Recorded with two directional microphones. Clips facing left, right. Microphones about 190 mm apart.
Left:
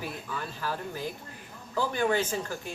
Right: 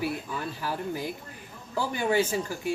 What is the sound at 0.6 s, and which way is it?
Speech, 15° right (ahead or behind).